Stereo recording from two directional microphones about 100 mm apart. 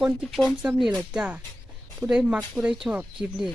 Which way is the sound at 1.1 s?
10° right (ahead or behind).